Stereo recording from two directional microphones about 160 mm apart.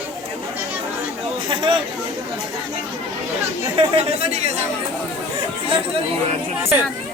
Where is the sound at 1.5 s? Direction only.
35° right (ahead or behind).